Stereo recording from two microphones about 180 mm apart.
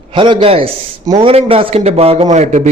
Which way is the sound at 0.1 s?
25° right (ahead or behind).